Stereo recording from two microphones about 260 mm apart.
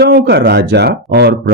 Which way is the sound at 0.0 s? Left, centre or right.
Right.